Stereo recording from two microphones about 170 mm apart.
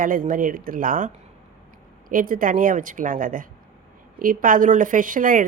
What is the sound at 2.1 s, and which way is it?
Speech, 55° right (ahead or behind).